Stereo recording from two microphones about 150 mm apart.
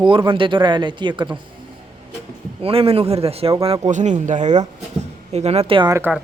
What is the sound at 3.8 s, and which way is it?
Speech, 50° right (ahead or behind).